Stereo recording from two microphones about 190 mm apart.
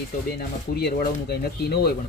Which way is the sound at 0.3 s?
55° left (ahead or behind).